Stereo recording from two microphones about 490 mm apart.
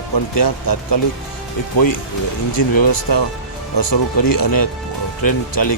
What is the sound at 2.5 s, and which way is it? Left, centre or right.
Speech, left.